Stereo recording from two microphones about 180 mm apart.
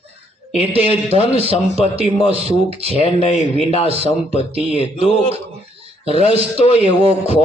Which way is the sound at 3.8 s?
35° right (ahead or behind).